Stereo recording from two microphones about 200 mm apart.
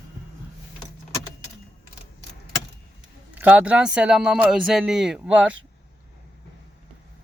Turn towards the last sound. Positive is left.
turn(degrees=-5)  # may be behind; listen again after turning